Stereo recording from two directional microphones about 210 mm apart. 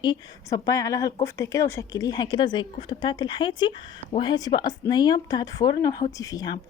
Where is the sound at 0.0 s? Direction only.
20° left (ahead or behind).